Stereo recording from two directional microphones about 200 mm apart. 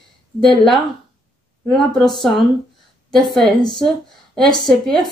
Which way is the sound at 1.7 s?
Centre (ahead or behind).